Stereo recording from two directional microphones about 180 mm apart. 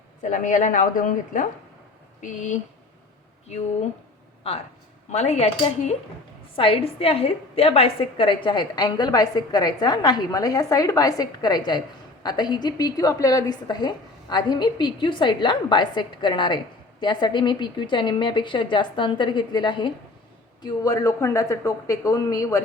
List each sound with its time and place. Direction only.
0.2 s a woman's voice: 45° left (ahead or behind)
5.1 s a woman's voice: 40° left (ahead or behind); by 22.6 s 20° left (ahead or behind)